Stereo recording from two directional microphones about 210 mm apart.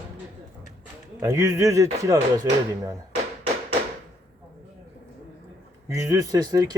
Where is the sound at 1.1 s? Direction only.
15° right (ahead or behind).